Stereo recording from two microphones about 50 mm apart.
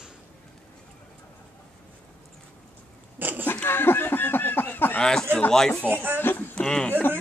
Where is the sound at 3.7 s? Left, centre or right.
Left.